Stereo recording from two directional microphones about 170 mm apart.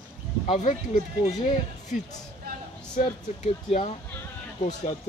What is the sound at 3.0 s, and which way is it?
Speech, 40° left (ahead or behind).